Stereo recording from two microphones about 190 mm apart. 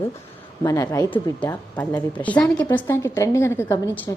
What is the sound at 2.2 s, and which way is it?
A woman's voice, 5° left (ahead or behind).